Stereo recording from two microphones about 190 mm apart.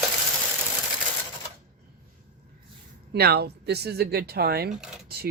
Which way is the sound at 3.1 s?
55° right (ahead or behind).